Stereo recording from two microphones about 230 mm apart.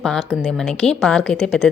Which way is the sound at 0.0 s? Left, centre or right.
Centre.